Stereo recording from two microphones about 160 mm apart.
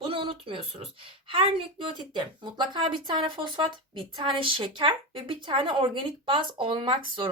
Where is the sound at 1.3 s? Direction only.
35° right (ahead or behind).